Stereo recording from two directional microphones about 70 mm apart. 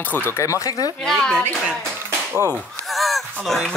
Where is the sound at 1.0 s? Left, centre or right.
Centre.